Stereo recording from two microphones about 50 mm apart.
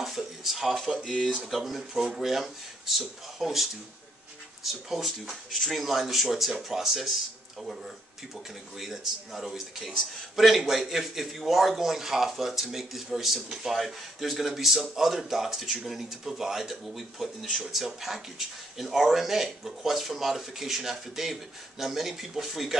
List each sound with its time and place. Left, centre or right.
0.0 s a sound: centre
1.1 s speech: centre
1.4 s speech: centre
4.8 s speech: centre